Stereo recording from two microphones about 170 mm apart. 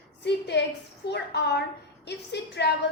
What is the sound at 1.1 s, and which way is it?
A woman's voice, 80° left.